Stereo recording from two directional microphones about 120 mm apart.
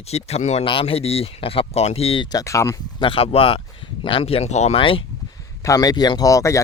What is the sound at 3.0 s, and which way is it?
Speech, 50° left (ahead or behind).